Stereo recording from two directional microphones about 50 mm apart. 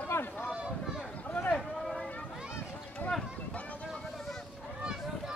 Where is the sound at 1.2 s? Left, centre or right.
Left.